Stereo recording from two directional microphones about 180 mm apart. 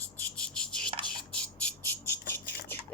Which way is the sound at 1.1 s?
5° left (ahead or behind).